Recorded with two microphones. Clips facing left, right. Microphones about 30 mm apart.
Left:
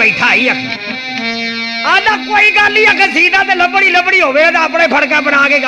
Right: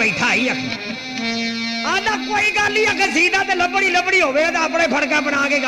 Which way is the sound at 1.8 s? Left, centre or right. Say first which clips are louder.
Left 10 dB; left.